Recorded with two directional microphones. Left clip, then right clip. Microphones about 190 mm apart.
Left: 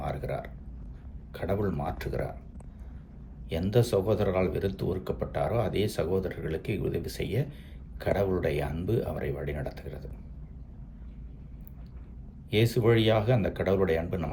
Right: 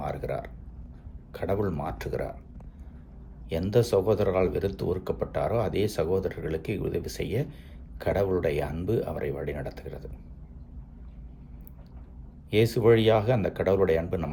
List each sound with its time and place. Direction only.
0.0 s a sound: 20° right (ahead or behind)
1.3 s speech: 20° right (ahead or behind)
3.5 s speech: 20° right (ahead or behind)
12.5 s speech: 20° right (ahead or behind)